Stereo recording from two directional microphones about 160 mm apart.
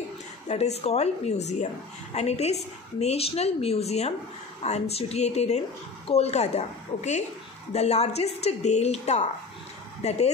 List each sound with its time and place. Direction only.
0.5 s a woman's voice: 40° left (ahead or behind)